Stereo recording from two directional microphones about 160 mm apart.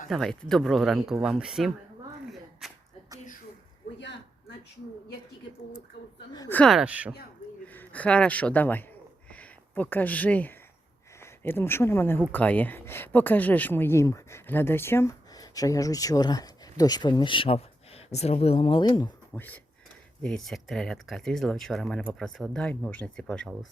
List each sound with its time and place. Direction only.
0.1 s speech: 5° left (ahead or behind)
2.2 s a sound: centre (ahead or behind)
6.5 s speech: 10° left (ahead or behind)
6.7 s speech: 10° right (ahead or behind)
7.6 s speech: 10° left (ahead or behind); by 19.1 s 25° left (ahead or behind)
19.3 s speech: 10° left (ahead or behind)